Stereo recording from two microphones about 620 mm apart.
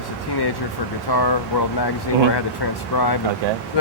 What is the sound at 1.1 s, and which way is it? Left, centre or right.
Speech, left.